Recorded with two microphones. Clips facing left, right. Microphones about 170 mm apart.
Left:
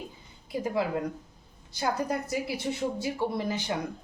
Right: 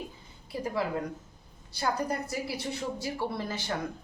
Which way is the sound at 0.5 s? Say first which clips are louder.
Left 2 dB; 20° left (ahead or behind).